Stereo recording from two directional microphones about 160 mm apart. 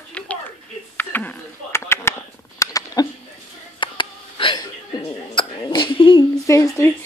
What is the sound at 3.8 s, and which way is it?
Hiccup, 30° left (ahead or behind).